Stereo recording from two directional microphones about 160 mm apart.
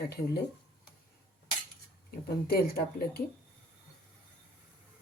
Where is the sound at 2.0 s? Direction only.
75° left (ahead or behind).